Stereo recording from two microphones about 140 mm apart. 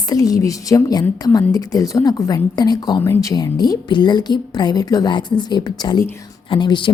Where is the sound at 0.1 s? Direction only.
25° left (ahead or behind).